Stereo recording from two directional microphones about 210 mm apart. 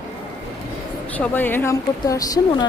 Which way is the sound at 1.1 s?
10° left (ahead or behind).